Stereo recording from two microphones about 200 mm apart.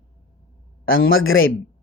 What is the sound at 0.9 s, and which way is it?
Speech, 85° left.